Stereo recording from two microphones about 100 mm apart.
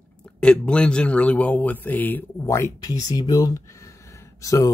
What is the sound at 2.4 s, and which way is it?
Speech, 30° left (ahead or behind).